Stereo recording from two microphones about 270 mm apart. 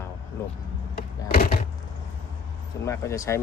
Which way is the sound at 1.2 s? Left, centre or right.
Left.